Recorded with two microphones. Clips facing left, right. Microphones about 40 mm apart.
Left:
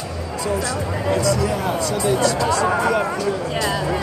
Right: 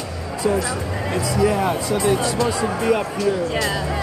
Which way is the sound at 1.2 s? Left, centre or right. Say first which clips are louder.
Right 1 dB; centre.